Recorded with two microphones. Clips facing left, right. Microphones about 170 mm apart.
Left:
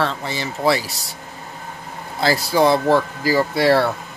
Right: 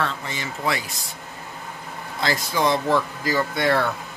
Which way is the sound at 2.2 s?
35° left (ahead or behind).